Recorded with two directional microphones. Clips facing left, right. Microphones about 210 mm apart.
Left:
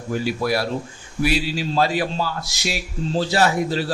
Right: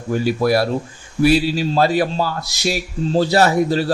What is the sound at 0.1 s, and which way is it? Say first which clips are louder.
A man's voice: right 5 dB; 45° right (ahead or behind).